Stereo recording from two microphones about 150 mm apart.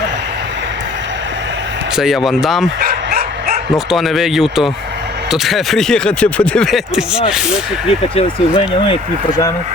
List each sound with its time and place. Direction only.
2.0 s speech: centre (ahead or behind)
2.8 s dog: 90° right
3.8 s speech: centre (ahead or behind)
7.9 s speech: 35° left (ahead or behind)